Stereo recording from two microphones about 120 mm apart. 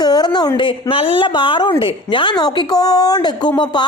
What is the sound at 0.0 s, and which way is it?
A woman's voice, 35° left (ahead or behind).